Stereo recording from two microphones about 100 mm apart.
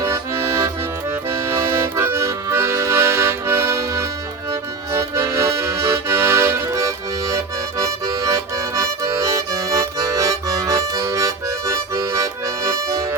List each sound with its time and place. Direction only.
0.0 s accordion: 30° right (ahead or behind)